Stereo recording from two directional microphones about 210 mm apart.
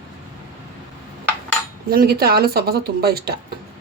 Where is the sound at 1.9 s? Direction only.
45° right (ahead or behind).